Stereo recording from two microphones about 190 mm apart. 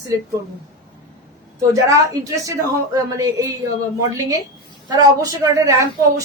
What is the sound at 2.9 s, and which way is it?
A woman's voice, 20° right (ahead or behind).